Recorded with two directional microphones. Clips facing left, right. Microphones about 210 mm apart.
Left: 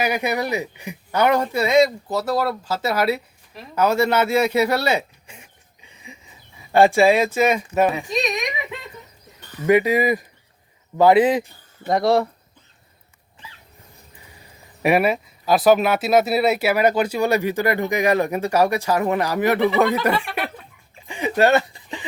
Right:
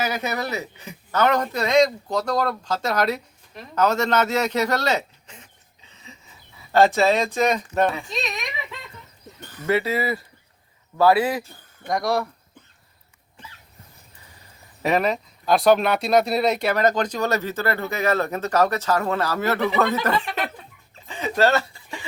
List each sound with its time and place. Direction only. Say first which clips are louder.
0.0 s speech: left 4 dB; 15° left (ahead or behind)
9.6 s speech: left 6 dB; 15° left (ahead or behind)
14.8 s speech: left 3 dB; 10° left (ahead or behind)
20.9 s a sound: left 3 dB; 15° left (ahead or behind)